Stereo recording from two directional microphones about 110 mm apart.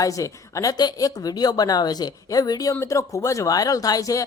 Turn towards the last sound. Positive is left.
turn(degrees=35)  # may be behind; listen again after turning